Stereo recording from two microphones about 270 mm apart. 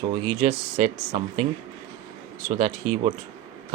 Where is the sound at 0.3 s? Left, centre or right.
Right.